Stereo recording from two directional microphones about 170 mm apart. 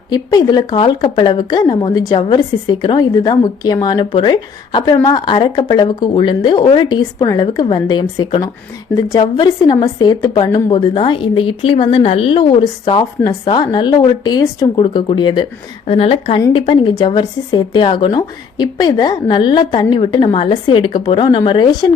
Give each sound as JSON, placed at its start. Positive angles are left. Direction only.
{"t": 0.1, "sound": "a woman's voice", "side_deg": 25}